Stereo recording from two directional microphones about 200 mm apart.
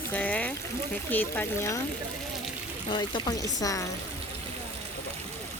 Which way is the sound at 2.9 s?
20° left (ahead or behind).